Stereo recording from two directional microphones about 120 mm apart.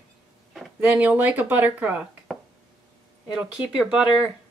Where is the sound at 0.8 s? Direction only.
15° right (ahead or behind).